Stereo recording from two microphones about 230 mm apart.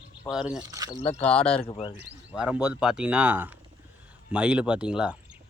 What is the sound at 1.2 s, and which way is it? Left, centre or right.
Speech, centre.